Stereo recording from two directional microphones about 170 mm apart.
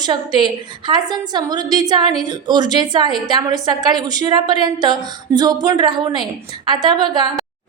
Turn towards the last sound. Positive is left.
turn(degrees=-25)  # may be behind; listen again after turning